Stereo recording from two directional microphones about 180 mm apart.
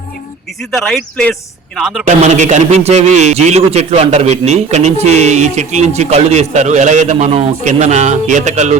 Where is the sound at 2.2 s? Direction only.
40° right (ahead or behind).